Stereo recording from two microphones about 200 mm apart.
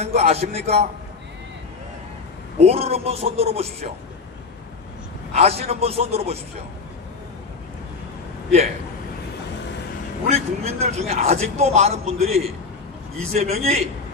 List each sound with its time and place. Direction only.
0.0 s a man's voice: 30° right (ahead or behind)
2.6 s a man's voice: 30° right (ahead or behind)
5.3 s a man's voice: 30° right (ahead or behind)
10.2 s a man's voice: 30° right (ahead or behind)